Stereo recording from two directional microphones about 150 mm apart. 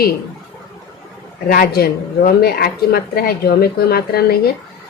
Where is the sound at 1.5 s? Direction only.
80° left.